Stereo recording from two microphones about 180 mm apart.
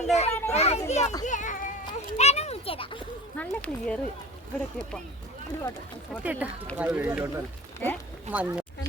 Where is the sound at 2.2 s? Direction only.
35° left (ahead or behind).